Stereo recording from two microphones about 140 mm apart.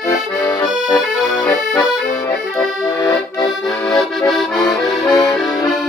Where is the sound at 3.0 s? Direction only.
25° left (ahead or behind).